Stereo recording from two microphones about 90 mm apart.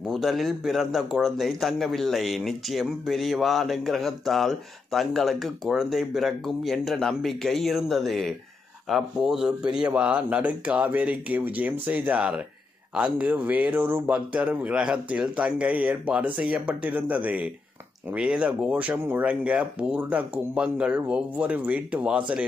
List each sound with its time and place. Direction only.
0.0 s a man's voice: centre (ahead or behind)